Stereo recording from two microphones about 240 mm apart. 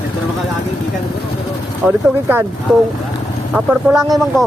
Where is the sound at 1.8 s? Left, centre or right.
Centre.